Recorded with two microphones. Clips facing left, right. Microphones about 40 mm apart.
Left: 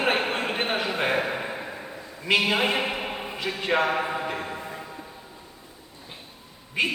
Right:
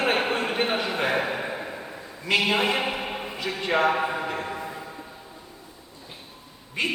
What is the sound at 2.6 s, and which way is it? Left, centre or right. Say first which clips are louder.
Speech: even; centre.